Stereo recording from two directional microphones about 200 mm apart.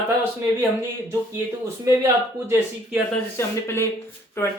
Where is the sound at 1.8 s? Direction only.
15° right (ahead or behind).